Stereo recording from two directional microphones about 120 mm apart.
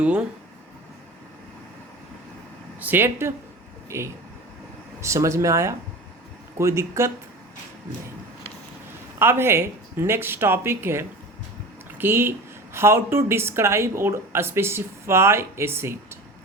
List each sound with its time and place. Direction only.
0.0 s speech: 10° right (ahead or behind)
2.8 s speech: 15° right (ahead or behind)
9.1 s speech: 20° right (ahead or behind)